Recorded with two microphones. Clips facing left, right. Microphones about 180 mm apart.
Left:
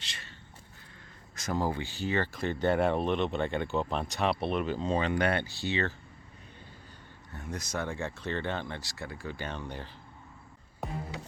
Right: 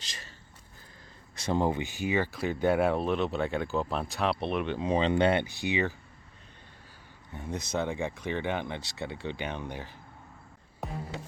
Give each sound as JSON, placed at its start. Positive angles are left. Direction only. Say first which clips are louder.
{"t": 0.0, "sound": "a sound", "louder": "right 1 dB", "side_deg": -40}
{"t": 1.4, "sound": "speech", "louder": "right 3 dB", "side_deg": -25}
{"t": 4.9, "sound": "speech", "louder": "right 5 dB", "side_deg": -25}
{"t": 7.4, "sound": "speech", "louder": "right 4 dB", "side_deg": -25}
{"t": 9.5, "sound": "speech", "louder": "right 2 dB", "side_deg": -15}
{"t": 10.8, "sound": "music", "louder": "even", "side_deg": 0}